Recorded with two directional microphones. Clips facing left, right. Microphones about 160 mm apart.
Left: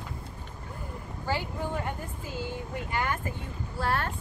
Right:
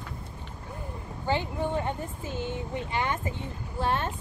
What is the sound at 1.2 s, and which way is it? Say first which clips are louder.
Speech: right 3 dB; 20° right (ahead or behind).